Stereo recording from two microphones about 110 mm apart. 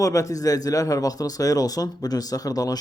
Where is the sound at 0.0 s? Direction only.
30° left (ahead or behind).